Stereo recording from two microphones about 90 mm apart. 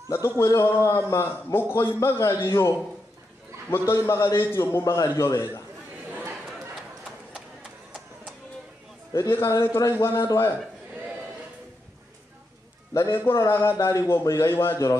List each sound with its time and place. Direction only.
0.1 s a man's voice: 30° left (ahead or behind)
3.7 s a man's voice: 25° left (ahead or behind)
9.1 s a man's voice: 30° left (ahead or behind)
12.9 s a man's voice: 30° left (ahead or behind)